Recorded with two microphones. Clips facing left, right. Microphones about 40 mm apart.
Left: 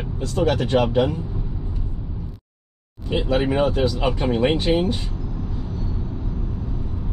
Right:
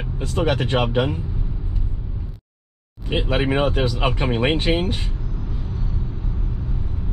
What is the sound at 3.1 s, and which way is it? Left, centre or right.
Speech, right.